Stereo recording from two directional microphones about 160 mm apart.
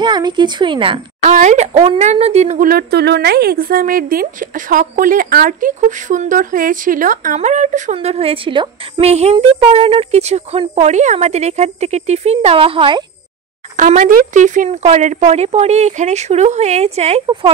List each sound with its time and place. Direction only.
0.0 s speech: 25° right (ahead or behind)
1.2 s speech: 50° right (ahead or behind); by 9.1 s 30° right (ahead or behind)
9.1 s speech: 40° right (ahead or behind)
13.7 s speech: 50° right (ahead or behind); by 17.5 s 35° right (ahead or behind)